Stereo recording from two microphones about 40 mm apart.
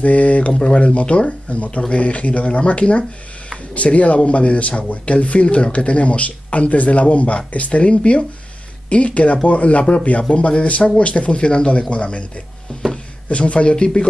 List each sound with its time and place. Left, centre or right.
0.0 s speech: left
3.7 s speech: left
13.3 s speech: left